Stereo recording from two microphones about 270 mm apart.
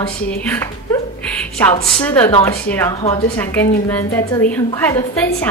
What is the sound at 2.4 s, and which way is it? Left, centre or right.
A woman's voice, centre.